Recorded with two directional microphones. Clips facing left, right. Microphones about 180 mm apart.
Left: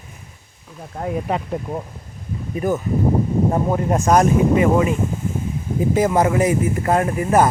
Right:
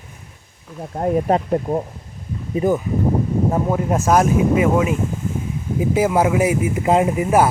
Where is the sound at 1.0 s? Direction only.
40° right (ahead or behind).